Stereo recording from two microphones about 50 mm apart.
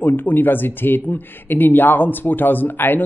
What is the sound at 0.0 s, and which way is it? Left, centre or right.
Speech, left.